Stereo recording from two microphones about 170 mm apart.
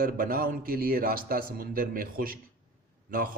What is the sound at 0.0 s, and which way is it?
A man's voice, 60° right (ahead or behind).